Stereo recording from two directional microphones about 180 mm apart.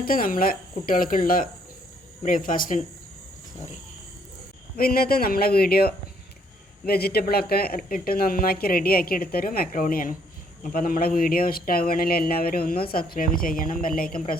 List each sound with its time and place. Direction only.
0.0 s speech: 50° left (ahead or behind)
4.8 s speech: 55° left (ahead or behind)